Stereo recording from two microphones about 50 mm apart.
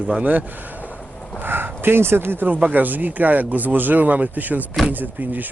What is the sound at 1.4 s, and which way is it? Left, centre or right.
Speech, right.